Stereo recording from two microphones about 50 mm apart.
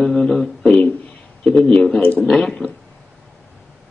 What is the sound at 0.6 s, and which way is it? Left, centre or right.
A man's voice, left.